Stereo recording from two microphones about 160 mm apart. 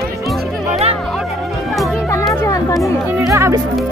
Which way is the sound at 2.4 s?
20° left (ahead or behind).